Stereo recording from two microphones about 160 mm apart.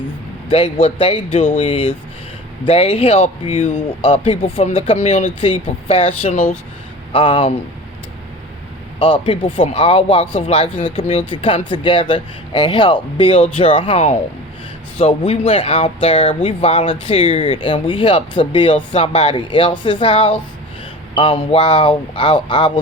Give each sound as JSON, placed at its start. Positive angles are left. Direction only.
{"t": 0.5, "sound": "speech", "side_deg": 35}
{"t": 9.0, "sound": "speech", "side_deg": 35}